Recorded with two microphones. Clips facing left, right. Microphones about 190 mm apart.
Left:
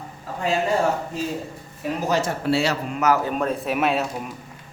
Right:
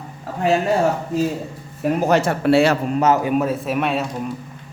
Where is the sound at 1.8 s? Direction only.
60° right (ahead or behind).